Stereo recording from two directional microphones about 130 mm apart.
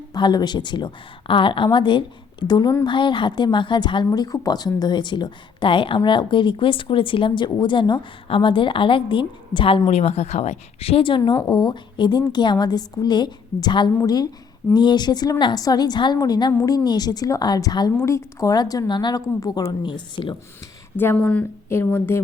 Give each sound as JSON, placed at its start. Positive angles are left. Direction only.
{"t": 0.1, "sound": "a woman's voice", "side_deg": 35}
{"t": 20.9, "sound": "a woman's voice", "side_deg": 15}